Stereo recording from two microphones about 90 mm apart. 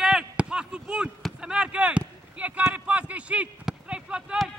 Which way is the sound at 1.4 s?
10° right (ahead or behind).